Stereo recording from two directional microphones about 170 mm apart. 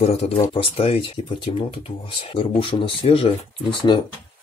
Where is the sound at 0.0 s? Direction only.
40° left (ahead or behind).